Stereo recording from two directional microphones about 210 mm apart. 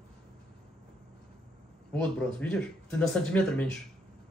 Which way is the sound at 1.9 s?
5° left (ahead or behind).